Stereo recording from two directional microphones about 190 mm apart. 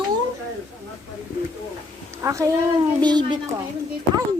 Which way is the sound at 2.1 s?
15° right (ahead or behind).